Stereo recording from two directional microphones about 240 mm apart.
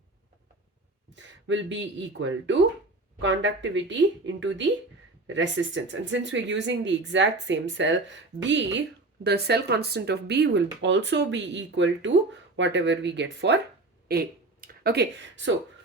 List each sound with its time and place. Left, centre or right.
1.1 s speech: right